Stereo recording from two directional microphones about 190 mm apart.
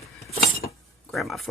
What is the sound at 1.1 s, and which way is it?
Speech, centre (ahead or behind).